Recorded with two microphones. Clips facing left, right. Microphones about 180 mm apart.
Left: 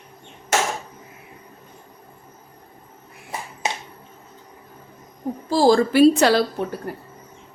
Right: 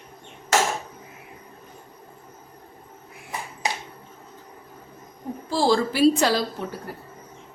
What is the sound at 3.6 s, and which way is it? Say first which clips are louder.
Finger snapping: left 1 dB; 20° left (ahead or behind).